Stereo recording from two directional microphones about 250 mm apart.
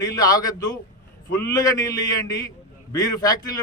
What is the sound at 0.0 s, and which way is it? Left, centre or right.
A man's voice, centre.